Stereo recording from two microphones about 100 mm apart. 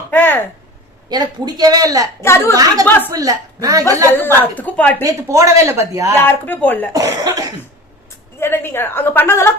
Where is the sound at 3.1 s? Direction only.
35° right (ahead or behind).